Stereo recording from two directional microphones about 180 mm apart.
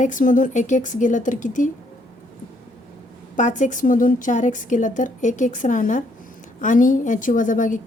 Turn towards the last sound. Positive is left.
turn(degrees=45)  # may be behind; listen again after turning